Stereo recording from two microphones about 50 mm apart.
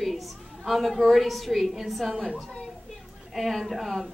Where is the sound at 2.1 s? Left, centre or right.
Centre.